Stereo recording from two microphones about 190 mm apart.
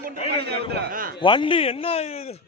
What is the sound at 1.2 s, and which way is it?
A man's voice, 25° left (ahead or behind).